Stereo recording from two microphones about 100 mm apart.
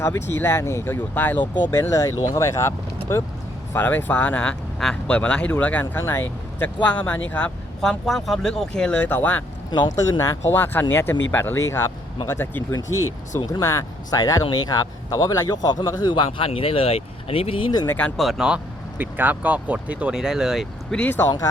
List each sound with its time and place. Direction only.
0.0 s speech: 25° left (ahead or behind)
1.8 s speech: 35° left (ahead or behind); by 9.4 s 15° left (ahead or behind)
9.9 s a man's voice: 30° left (ahead or behind); by 16.5 s 55° left (ahead or behind)
16.5 s speech: 70° left (ahead or behind)
17.8 s speech: 15° left (ahead or behind)
18.2 s speech: 5° right (ahead or behind)
20.9 s speech: 15° left (ahead or behind)
21.2 s speech: 40° left (ahead or behind)